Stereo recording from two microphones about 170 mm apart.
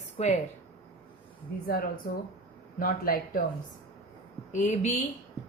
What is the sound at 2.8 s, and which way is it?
Speech, 55° left (ahead or behind).